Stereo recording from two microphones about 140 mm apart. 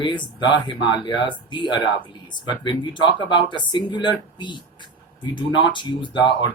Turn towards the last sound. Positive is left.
turn(degrees=35)  # may be behind; listen again after turning